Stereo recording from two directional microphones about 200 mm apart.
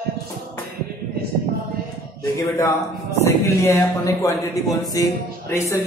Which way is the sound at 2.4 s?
15° left (ahead or behind).